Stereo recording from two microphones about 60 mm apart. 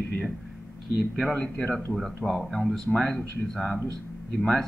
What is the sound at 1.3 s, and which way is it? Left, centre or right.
Speech, centre.